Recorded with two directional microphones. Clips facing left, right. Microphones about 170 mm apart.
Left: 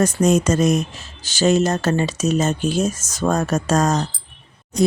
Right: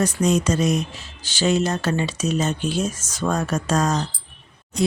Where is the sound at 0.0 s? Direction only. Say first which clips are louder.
Left 3 dB; 45° left (ahead or behind).